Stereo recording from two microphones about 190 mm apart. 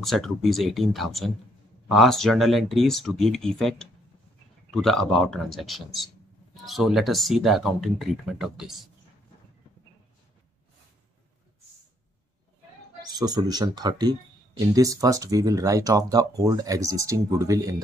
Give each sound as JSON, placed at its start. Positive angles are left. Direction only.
{"t": 0.0, "sound": "speech", "side_deg": 0}
{"t": 13.0, "sound": "speech", "side_deg": -20}